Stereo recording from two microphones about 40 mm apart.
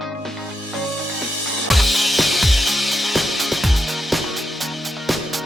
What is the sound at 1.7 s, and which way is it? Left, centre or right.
Music, centre.